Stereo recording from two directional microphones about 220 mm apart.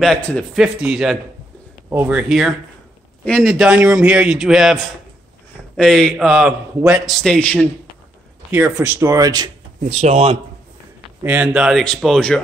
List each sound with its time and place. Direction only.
0.0 s a man's voice: 5° left (ahead or behind)
5.8 s a man's voice: centre (ahead or behind)
8.5 s speech: 5° right (ahead or behind)
9.8 s speech: 30° right (ahead or behind)
11.2 s a man's voice: 5° right (ahead or behind)